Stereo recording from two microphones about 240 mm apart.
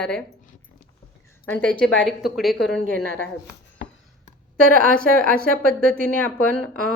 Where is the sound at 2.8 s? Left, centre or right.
Right.